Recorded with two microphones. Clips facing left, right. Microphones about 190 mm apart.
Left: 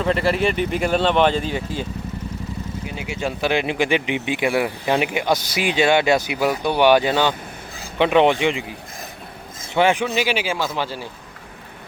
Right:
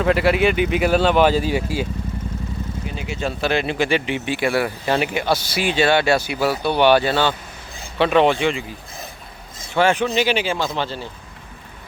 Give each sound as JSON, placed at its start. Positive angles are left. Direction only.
{"t": 0.0, "sound": "speech", "side_deg": -5}
{"t": 2.8, "sound": "speech", "side_deg": 10}
{"t": 9.6, "sound": "a sound", "side_deg": 20}
{"t": 10.2, "sound": "speech", "side_deg": 10}